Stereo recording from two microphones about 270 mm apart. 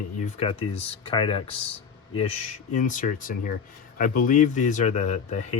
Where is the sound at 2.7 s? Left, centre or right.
Left.